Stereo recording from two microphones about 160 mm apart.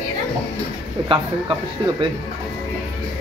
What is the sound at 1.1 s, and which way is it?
Speech, 30° right (ahead or behind).